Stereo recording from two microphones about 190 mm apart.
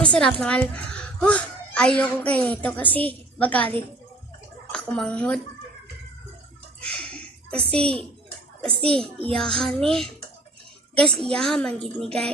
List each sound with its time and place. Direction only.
0.0 s a child's voice: 5° left (ahead or behind)
4.7 s speech: 5° left (ahead or behind)
6.8 s a sound: 5° left (ahead or behind)
7.6 s a child's voice: 30° right (ahead or behind)
8.8 s a woman's voice: 5° left (ahead or behind)